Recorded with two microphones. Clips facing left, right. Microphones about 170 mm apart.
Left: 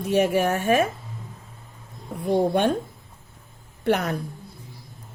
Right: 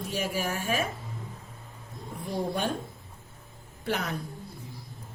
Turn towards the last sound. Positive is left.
turn(degrees=60)  # may be behind; listen again after turning